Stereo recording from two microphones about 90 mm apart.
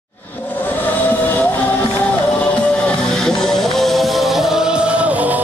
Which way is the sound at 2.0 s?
15° left (ahead or behind).